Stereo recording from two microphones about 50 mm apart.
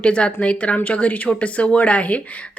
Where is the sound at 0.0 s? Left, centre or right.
Left.